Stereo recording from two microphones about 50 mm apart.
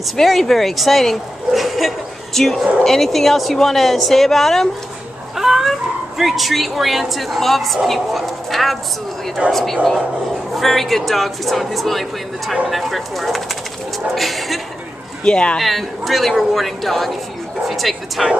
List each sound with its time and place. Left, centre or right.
0.1 s speech: centre
5.3 s speech: centre
15.2 s speech: centre
15.6 s speech: centre